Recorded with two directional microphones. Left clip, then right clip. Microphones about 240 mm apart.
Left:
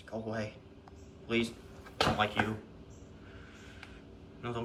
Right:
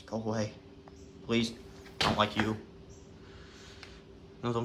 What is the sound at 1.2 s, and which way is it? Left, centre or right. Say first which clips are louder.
Speech: right 1 dB; centre.